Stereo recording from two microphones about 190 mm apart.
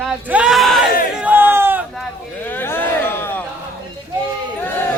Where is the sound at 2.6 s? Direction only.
10° left (ahead or behind).